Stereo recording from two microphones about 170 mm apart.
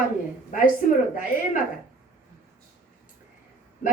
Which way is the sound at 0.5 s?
55° left (ahead or behind).